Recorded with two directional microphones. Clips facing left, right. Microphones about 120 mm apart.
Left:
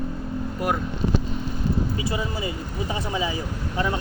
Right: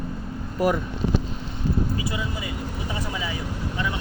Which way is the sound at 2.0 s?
30° left (ahead or behind).